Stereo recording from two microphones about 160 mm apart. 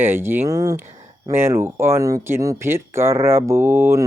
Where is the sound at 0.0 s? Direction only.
15° right (ahead or behind).